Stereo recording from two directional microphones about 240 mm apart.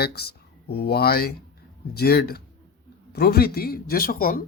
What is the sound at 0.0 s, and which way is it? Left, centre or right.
Speech, left.